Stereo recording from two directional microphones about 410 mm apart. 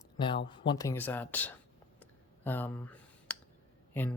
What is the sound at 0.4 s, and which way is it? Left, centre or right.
Speech, centre.